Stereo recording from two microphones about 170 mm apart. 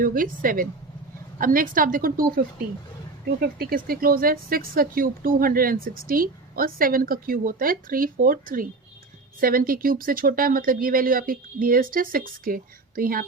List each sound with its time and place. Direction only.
0.0 s a woman's voice: 55° right (ahead or behind)
3.6 s a woman's voice: 60° right (ahead or behind)